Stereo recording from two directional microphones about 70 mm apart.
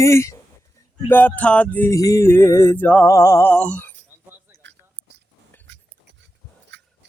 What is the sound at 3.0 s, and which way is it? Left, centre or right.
Music, left.